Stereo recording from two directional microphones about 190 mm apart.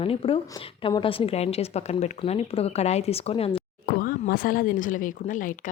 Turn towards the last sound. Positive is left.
turn(degrees=45)  # may be behind; listen again after turning